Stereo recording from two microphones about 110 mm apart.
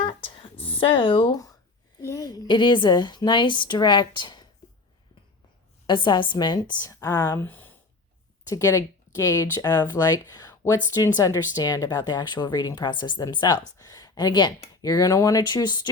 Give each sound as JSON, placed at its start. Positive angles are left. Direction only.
{"t": 0.0, "sound": "a sound", "side_deg": 50}
{"t": 0.8, "sound": "a woman's voice", "side_deg": 50}
{"t": 2.0, "sound": "a woman's voice", "side_deg": 30}
{"t": 5.8, "sound": "a woman's voice", "side_deg": 45}
{"t": 7.3, "sound": "speech", "side_deg": 20}
{"t": 8.4, "sound": "speech", "side_deg": 30}